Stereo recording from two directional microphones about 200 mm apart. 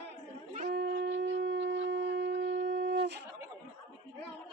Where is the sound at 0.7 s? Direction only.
60° right (ahead or behind).